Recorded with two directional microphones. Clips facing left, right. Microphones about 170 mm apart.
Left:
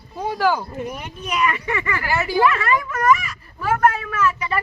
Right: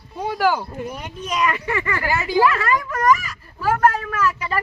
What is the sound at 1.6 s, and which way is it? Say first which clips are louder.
Speech: right 1 dB; 35° right (ahead or behind).